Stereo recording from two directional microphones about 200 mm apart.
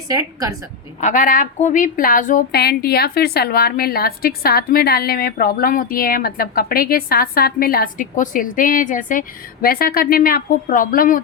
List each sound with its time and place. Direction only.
0.1 s a woman's voice: 15° right (ahead or behind)
1.0 s a woman's voice: 40° left (ahead or behind)